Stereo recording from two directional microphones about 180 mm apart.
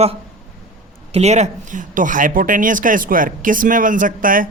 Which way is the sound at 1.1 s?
40° right (ahead or behind).